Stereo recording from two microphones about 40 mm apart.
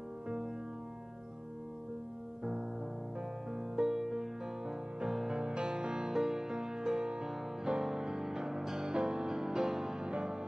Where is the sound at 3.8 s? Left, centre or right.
Centre.